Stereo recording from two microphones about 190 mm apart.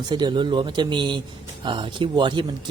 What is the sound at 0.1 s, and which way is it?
Speech, 25° right (ahead or behind).